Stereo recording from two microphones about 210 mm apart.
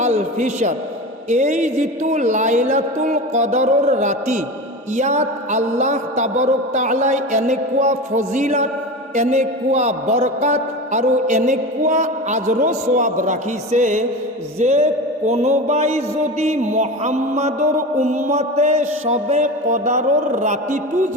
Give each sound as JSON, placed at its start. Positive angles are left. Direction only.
{"t": 0.0, "sound": "a man's voice", "side_deg": -35}